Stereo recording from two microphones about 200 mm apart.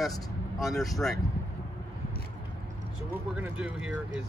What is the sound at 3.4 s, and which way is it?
Speech, 5° right (ahead or behind).